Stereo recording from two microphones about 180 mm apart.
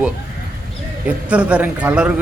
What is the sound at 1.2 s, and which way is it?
Speech, 5° right (ahead or behind).